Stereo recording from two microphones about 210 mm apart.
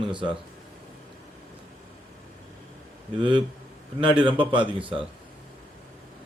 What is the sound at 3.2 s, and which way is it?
A man's voice, 25° right (ahead or behind).